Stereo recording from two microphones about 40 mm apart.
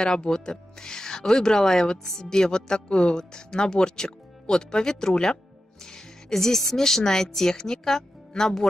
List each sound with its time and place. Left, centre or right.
0.0 s speech: centre